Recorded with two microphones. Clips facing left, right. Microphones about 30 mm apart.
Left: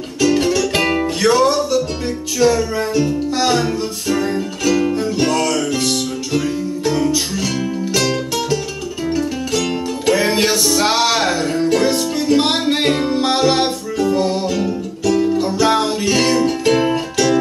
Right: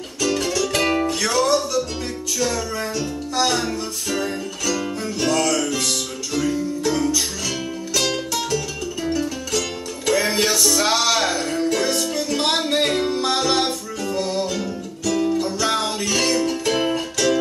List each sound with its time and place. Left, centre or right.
0.2 s music: left
3.3 s music: left